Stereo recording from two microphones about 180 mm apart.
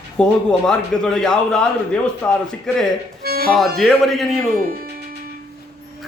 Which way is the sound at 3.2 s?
55° right (ahead or behind).